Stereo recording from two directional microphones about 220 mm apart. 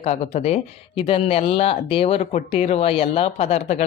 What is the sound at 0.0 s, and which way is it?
Speech, 30° left (ahead or behind).